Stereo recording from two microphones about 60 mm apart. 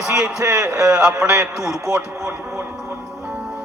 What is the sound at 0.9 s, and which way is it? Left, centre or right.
Speech, centre.